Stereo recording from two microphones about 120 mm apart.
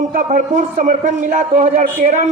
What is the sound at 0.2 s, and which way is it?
A man's voice, 90° right.